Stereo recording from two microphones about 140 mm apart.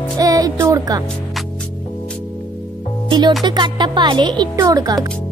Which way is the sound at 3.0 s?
30° right (ahead or behind).